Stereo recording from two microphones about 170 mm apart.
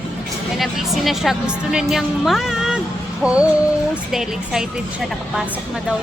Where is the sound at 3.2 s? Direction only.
5° right (ahead or behind).